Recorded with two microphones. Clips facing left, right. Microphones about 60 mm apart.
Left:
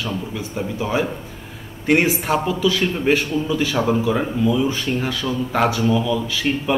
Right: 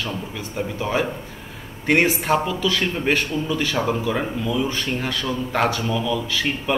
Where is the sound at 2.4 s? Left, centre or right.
Centre.